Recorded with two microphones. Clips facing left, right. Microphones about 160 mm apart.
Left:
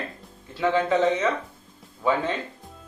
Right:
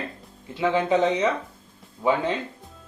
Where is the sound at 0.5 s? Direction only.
20° right (ahead or behind).